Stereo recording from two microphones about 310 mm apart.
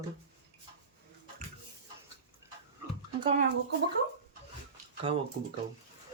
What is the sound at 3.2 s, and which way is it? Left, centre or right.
Speech, centre.